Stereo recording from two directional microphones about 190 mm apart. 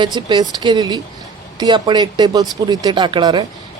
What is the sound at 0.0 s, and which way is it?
Speech, 25° right (ahead or behind).